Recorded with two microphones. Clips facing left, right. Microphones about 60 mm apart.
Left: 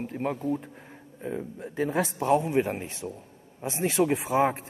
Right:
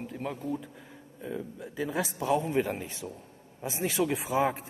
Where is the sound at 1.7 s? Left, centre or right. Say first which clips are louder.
Left 5 dB; left.